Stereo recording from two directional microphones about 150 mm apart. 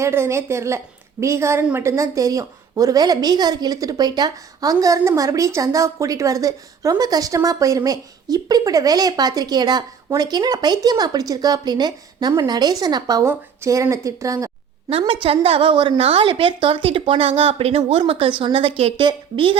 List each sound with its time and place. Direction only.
0.0 s a woman's voice: 20° right (ahead or behind)
14.8 s a woman's voice: 40° right (ahead or behind)